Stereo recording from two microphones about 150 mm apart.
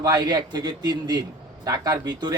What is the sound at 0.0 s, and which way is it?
A man's voice, 25° right (ahead or behind).